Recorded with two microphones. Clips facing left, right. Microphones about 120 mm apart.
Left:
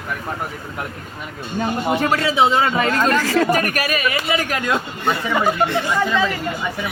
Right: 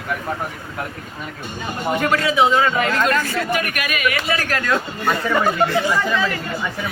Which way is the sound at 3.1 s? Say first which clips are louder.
Left 4 dB; 90° left.